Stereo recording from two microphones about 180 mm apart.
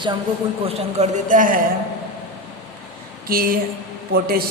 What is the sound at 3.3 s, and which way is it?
Speech, 55° right (ahead or behind).